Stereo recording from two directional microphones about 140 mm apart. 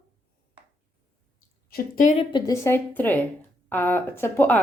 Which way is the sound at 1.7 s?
85° left.